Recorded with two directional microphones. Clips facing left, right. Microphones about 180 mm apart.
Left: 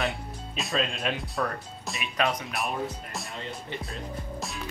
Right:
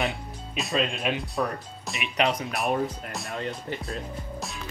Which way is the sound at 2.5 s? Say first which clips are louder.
Right 5 dB; centre (ahead or behind).